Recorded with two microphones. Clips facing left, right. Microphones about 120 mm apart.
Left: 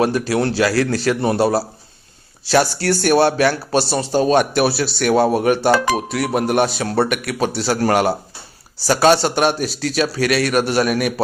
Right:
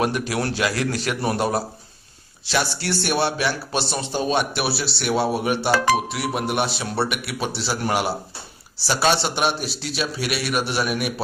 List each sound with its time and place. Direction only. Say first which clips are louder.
0.0 s a man's voice: left 6 dB; 30° left (ahead or behind)
2.5 s a man's voice: left 8 dB; 45° left (ahead or behind)